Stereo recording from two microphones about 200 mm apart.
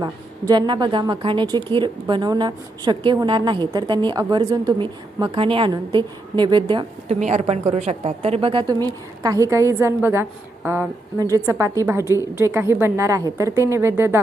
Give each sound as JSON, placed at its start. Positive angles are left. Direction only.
{"t": 0.0, "sound": "a woman's voice", "side_deg": -20}